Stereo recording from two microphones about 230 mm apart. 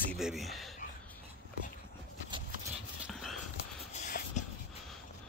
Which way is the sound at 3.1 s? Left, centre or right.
Centre.